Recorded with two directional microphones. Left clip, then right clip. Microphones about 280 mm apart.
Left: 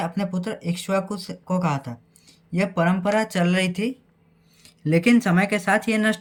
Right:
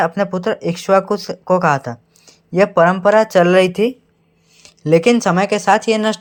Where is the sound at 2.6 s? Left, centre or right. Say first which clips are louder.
Right 11 dB; centre.